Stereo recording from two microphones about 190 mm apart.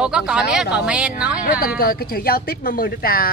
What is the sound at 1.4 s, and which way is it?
Speech, 45° left (ahead or behind).